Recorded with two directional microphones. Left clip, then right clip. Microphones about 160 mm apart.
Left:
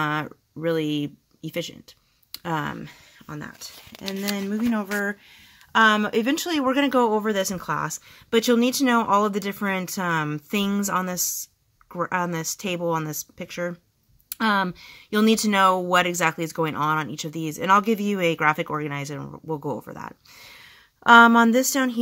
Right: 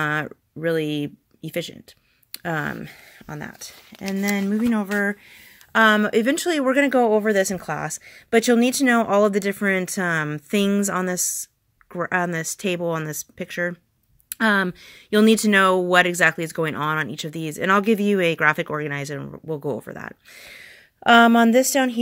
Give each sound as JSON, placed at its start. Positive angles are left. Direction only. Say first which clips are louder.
{"t": 0.0, "sound": "speech", "louder": "right 2 dB", "side_deg": -25}